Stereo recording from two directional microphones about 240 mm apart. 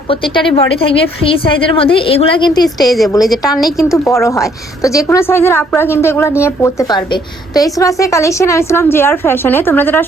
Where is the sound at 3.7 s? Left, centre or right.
Centre.